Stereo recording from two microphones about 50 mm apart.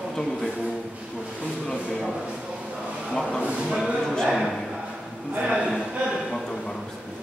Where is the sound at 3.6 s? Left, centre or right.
Centre.